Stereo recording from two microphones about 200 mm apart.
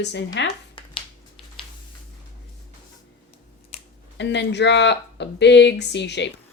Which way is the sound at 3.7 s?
30° left (ahead or behind).